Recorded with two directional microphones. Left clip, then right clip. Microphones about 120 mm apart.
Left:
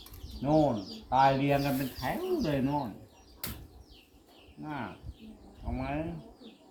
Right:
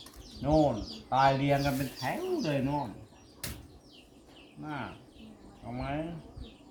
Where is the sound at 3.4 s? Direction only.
25° left (ahead or behind).